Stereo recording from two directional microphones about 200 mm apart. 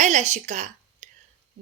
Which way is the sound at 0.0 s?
35° right (ahead or behind).